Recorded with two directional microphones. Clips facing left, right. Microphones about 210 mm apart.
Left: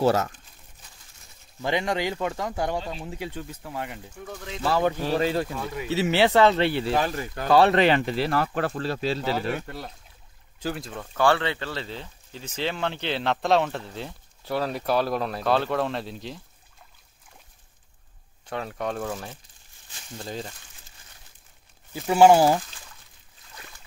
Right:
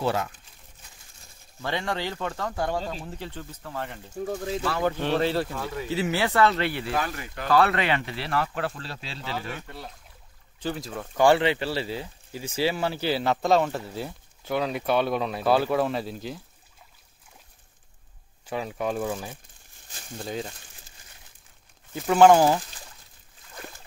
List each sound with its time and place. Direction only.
0.0 s speech: 40° left (ahead or behind)
1.6 s speech: 15° left (ahead or behind)
4.3 s speech: 35° right (ahead or behind)
5.2 s speech: 15° left (ahead or behind); by 9.4 s 40° left (ahead or behind)
10.6 s speech: 5° left (ahead or behind)
11.0 s speech: 15° right (ahead or behind)
18.4 s speech: 5° right (ahead or behind)
21.9 s speech: 10° left (ahead or behind)